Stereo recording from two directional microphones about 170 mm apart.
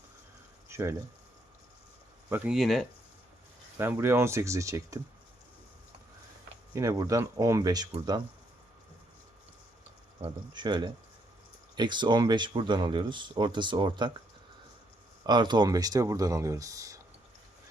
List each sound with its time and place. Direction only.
0.7 s speech: 15° right (ahead or behind)
2.5 s speech: centre (ahead or behind)
3.8 s speech: 15° right (ahead or behind)
6.7 s speech: 20° right (ahead or behind)
10.2 s speech: 25° right (ahead or behind)
15.3 s speech: 25° right (ahead or behind)